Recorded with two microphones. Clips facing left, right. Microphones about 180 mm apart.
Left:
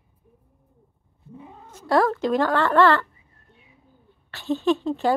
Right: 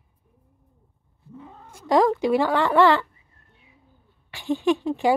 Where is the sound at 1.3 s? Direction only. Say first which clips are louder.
Even; 15° left (ahead or behind).